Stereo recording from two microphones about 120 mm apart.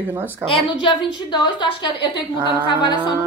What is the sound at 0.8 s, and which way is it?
A woman's voice, 40° left (ahead or behind).